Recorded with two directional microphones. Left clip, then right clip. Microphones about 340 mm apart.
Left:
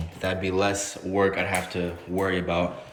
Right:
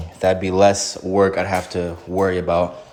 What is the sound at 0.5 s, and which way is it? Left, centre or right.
Speech, centre.